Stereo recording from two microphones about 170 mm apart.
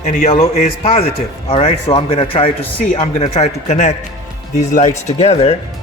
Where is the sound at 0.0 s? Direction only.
45° left (ahead or behind).